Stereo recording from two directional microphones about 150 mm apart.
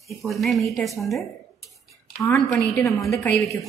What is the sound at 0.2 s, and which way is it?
A woman's voice, centre (ahead or behind).